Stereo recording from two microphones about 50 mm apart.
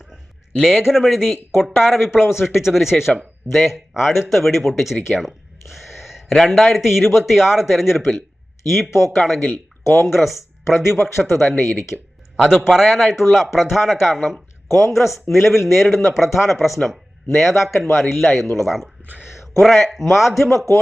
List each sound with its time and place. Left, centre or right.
0.9 s speech: centre
2.4 s a man's voice: left
2.6 s speech: centre
5.7 s a sound: centre
6.6 s speech: centre
9.8 s speech: left
10.1 s speech: centre
10.8 s a man's voice: left
11.3 s speech: centre
12.4 s a man's voice: centre